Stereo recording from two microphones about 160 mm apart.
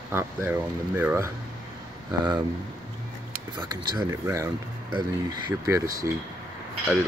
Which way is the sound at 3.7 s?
25° right (ahead or behind).